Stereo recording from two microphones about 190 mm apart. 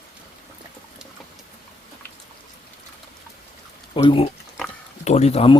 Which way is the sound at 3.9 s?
25° left (ahead or behind).